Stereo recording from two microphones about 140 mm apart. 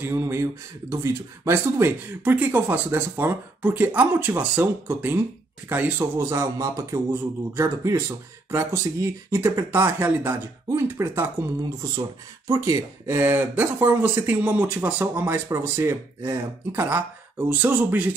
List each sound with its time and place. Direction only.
0.0 s speech: 20° right (ahead or behind)